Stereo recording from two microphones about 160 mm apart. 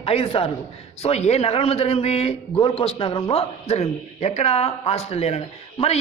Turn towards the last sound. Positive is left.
turn(degrees=40)  # may be behind; listen again after turning